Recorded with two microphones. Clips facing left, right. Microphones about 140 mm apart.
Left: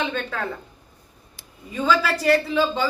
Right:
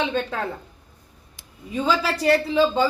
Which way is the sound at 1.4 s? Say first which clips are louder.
Right 1 dB; 15° right (ahead or behind).